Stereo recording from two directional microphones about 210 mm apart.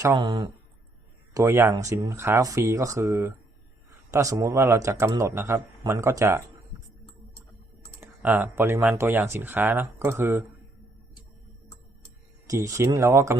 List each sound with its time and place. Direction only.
0.0 s speech: 20° right (ahead or behind)
8.0 s speech: 10° right (ahead or behind)
12.5 s speech: 15° right (ahead or behind)